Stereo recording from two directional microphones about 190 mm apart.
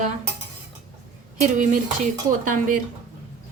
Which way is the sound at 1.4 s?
40° right (ahead or behind).